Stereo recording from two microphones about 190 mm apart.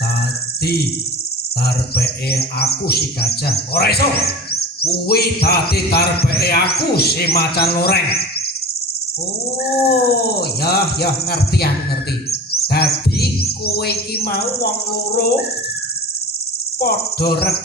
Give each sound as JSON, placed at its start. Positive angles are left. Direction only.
{"t": 1.6, "sound": "speech", "side_deg": 55}
{"t": 9.6, "sound": "speech", "side_deg": 55}
{"t": 12.3, "sound": "chirp", "side_deg": 55}
{"t": 16.8, "sound": "speech", "side_deg": 55}